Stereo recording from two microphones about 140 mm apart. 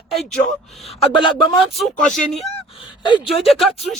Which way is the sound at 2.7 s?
35° left (ahead or behind).